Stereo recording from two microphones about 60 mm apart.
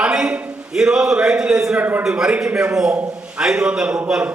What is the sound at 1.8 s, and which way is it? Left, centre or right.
Speech, right.